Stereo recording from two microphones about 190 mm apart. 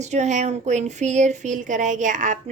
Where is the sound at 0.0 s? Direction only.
35° right (ahead or behind).